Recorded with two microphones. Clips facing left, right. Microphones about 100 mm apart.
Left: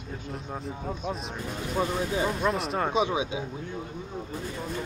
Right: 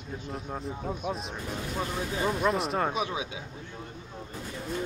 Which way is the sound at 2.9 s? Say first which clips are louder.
Left 5 dB; 25° left (ahead or behind).